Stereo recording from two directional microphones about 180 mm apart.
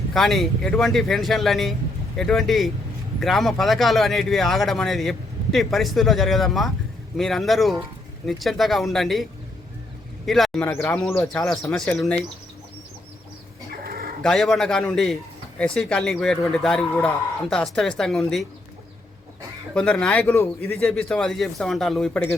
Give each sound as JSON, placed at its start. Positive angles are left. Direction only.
{"t": 0.1, "sound": "a man's voice", "side_deg": 0}
{"t": 10.2, "sound": "a man's voice", "side_deg": 0}
{"t": 13.7, "sound": "bird", "side_deg": -55}
{"t": 14.2, "sound": "a man's voice", "side_deg": 5}
{"t": 19.7, "sound": "a man's voice", "side_deg": 5}